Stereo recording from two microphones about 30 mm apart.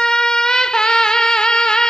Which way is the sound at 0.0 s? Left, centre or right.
Left.